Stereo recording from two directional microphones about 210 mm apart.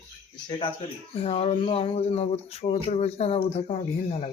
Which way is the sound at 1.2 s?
30° left (ahead or behind).